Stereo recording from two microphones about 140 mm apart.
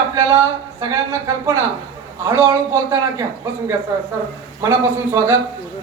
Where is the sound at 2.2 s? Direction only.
20° right (ahead or behind).